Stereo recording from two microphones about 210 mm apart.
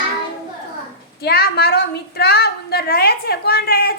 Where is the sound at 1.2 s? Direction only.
50° left (ahead or behind).